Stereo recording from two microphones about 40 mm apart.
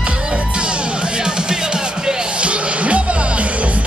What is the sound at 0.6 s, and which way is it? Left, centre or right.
Music, right.